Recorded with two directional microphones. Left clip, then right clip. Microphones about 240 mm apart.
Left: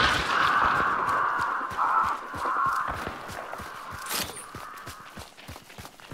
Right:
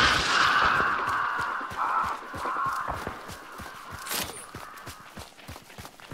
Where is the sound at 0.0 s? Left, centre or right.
Right.